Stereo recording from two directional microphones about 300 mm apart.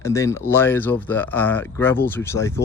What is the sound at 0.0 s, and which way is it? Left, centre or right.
Speech, centre.